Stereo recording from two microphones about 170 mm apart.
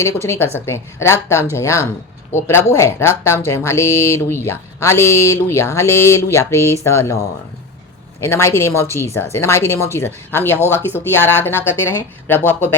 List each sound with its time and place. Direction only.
0.3 s speech: 15° left (ahead or behind)